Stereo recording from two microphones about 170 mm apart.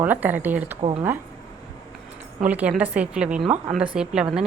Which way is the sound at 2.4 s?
10° right (ahead or behind).